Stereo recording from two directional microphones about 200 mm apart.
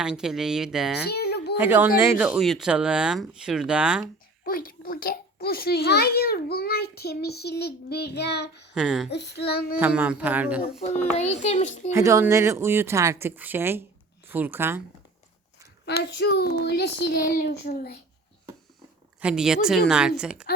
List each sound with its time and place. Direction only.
0.0 s speech: 5° right (ahead or behind)
1.0 s a sound: 55° left (ahead or behind)
1.5 s speech: 10° right (ahead or behind)
4.4 s a child's voice: 45° left (ahead or behind)
8.7 s speech: 5° right (ahead or behind)
9.0 s child singing: 55° left (ahead or behind)
9.5 s a child's voice: 50° left (ahead or behind)
9.8 s speech: 5° right (ahead or behind)
10.8 s a child's voice: 30° left (ahead or behind)
11.9 s speech: 15° right (ahead or behind)
15.9 s a child's voice: 55° left (ahead or behind)
19.2 s speech: 5° right (ahead or behind)